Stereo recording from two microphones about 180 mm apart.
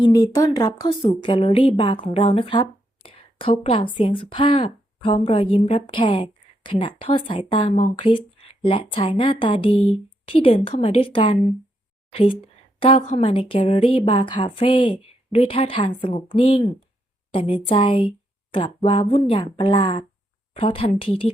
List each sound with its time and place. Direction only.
0.0 s a woman's voice: 20° left (ahead or behind)